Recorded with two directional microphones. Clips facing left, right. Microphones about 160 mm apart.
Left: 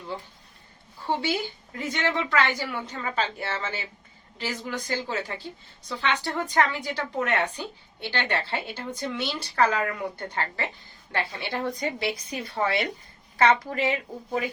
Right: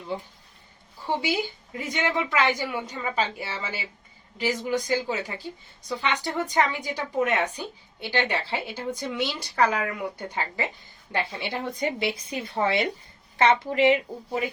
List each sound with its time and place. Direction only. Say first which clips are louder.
1.0 s a woman's voice: even; 15° right (ahead or behind)